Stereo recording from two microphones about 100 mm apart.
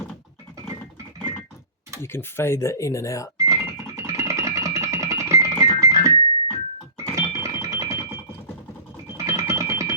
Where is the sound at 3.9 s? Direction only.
30° right (ahead or behind).